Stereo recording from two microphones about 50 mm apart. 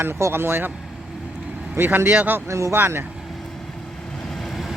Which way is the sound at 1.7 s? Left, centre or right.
Right.